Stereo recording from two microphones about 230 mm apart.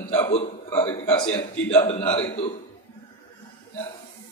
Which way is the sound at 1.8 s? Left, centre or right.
Left.